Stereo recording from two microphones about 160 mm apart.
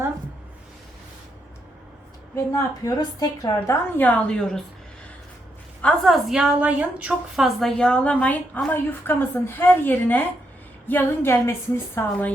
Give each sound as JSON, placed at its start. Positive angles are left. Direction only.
{"t": 2.3, "sound": "a woman's voice", "side_deg": 20}
{"t": 5.8, "sound": "a woman's voice", "side_deg": 0}